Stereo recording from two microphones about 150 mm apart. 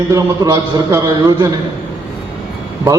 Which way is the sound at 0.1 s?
25° right (ahead or behind).